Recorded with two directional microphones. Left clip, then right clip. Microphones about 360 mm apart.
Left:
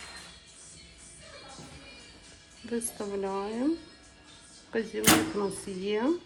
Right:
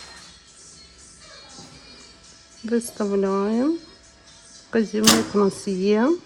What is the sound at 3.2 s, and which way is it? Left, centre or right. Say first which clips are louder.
Speech: right 8 dB; right.